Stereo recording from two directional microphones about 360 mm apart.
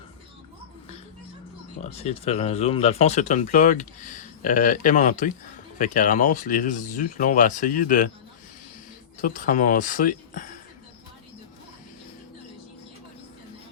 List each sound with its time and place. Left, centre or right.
1.8 s speech: centre
9.2 s speech: left